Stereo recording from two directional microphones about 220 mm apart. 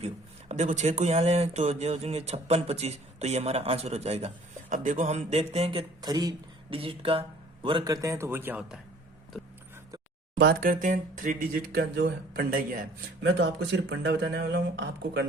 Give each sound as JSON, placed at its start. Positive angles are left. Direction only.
{"t": 0.0, "sound": "speech", "side_deg": -30}
{"t": 10.3, "sound": "speech", "side_deg": -50}
{"t": 13.4, "sound": "speech", "side_deg": -50}